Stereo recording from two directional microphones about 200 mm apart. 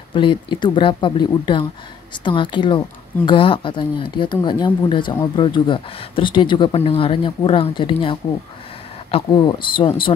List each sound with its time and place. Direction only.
0.1 s speech: 25° left (ahead or behind)